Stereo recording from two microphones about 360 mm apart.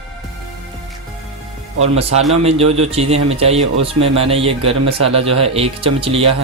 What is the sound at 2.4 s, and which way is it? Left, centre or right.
Speech, centre.